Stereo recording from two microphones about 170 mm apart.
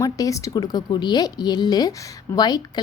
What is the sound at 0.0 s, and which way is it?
A woman's voice, 20° left (ahead or behind).